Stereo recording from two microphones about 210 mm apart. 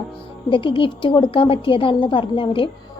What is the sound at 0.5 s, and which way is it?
A woman's voice, 25° left (ahead or behind).